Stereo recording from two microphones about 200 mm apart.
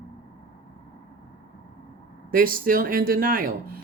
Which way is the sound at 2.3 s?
45° right (ahead or behind).